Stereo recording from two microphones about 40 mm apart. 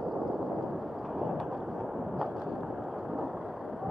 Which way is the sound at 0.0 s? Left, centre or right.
Centre.